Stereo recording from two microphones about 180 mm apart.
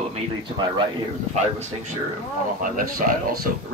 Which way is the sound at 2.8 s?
50° right (ahead or behind).